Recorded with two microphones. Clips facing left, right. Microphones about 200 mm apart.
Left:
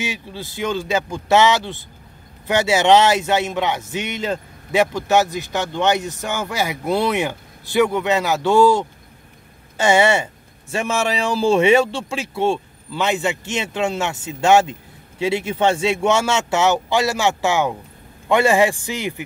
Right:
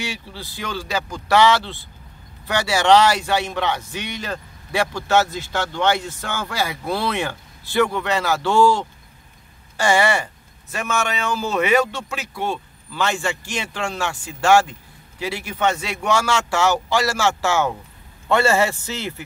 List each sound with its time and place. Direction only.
0.0 s a man's voice: 20° left (ahead or behind)